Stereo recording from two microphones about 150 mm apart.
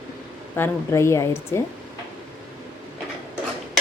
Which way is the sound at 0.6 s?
15° left (ahead or behind).